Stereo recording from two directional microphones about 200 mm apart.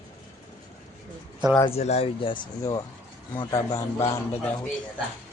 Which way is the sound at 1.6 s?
30° left (ahead or behind).